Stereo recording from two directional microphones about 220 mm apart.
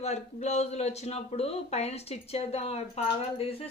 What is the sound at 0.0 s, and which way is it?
Speech, 30° left (ahead or behind).